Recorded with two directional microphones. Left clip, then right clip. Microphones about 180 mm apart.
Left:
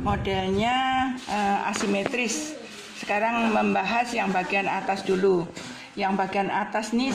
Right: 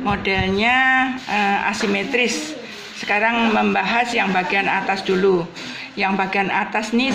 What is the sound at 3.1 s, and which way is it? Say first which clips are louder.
Speech: right 6 dB; 35° left (ahead or behind).